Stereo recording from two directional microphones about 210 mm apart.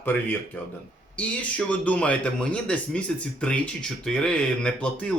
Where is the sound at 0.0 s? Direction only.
10° left (ahead or behind).